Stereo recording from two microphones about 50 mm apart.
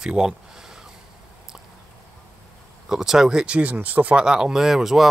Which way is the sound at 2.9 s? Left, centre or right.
Centre.